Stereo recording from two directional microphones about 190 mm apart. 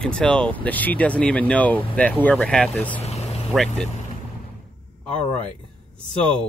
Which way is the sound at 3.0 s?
35° left (ahead or behind).